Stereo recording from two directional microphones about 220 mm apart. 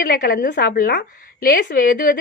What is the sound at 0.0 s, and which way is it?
Speech, 40° left (ahead or behind).